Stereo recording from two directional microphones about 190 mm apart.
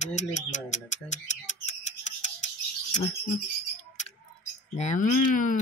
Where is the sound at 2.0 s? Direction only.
40° left (ahead or behind).